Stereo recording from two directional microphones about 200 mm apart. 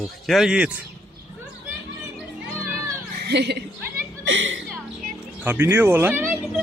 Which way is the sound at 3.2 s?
55° right (ahead or behind).